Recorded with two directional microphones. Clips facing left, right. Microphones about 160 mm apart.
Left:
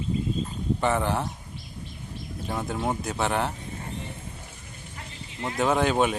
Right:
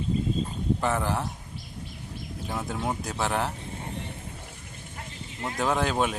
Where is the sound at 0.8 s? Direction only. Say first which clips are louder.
Left 5 dB; centre (ahead or behind).